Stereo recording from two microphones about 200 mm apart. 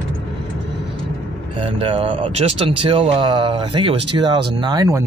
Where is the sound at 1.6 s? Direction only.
25° right (ahead or behind).